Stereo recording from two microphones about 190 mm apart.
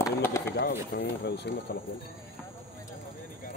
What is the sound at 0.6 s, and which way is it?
Speech, 60° left (ahead or behind).